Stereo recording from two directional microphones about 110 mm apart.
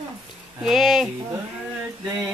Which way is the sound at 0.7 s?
5° right (ahead or behind).